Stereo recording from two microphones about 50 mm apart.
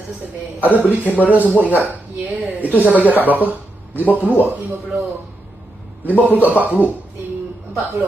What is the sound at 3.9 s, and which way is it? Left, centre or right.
Speech, left.